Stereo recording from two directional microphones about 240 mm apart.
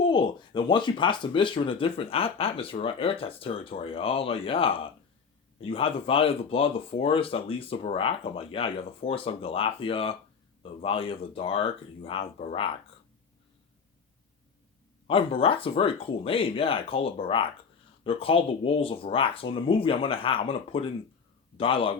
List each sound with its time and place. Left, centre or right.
0.0 s speech: centre
15.0 s speech: left